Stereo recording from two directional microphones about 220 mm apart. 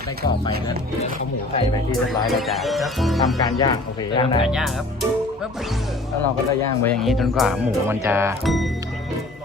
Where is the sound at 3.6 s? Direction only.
20° left (ahead or behind).